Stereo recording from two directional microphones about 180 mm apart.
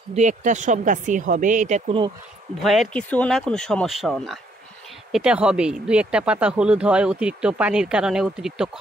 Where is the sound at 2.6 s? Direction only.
Centre (ahead or behind).